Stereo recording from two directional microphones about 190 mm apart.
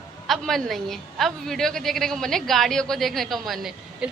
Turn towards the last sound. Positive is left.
turn(degrees=0)  # may be behind; listen again after turning